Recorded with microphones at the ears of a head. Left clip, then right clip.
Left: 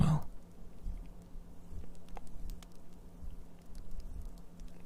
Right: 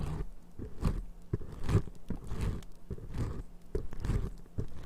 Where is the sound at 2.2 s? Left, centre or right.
Right.